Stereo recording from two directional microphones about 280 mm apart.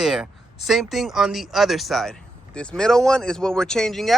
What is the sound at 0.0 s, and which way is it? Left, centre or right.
Speech, centre.